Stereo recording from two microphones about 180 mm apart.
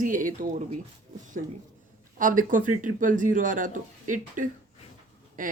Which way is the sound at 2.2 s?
50° right (ahead or behind).